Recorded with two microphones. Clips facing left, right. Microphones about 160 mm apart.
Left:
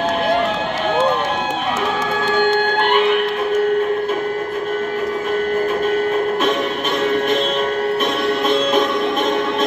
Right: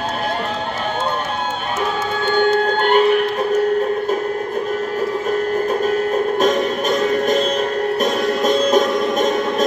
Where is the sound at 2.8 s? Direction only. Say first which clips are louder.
Right 3 dB; 40° right (ahead or behind).